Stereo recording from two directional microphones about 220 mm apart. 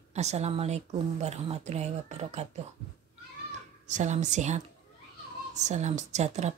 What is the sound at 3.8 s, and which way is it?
Speech, 35° right (ahead or behind).